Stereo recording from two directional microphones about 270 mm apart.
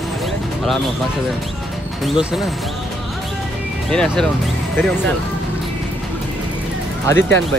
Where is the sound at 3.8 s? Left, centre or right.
Centre.